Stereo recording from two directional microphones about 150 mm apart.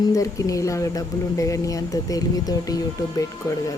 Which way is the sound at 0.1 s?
20° left (ahead or behind).